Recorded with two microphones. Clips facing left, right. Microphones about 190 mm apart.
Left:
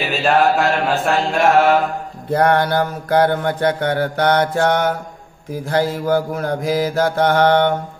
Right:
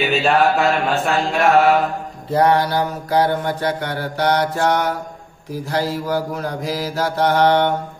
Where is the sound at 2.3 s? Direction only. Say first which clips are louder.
Left 1 dB; 55° left (ahead or behind).